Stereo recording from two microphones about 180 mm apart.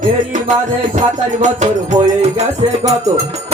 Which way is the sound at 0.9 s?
40° right (ahead or behind).